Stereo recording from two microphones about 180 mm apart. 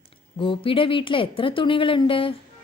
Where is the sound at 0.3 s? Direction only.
30° left (ahead or behind).